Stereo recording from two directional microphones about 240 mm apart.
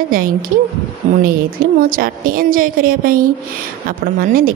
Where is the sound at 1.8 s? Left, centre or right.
Right.